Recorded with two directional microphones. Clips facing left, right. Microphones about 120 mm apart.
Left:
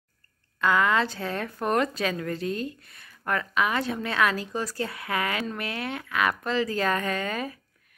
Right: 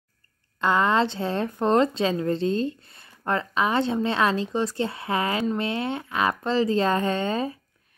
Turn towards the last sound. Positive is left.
turn(degrees=-30)  # may be behind; listen again after turning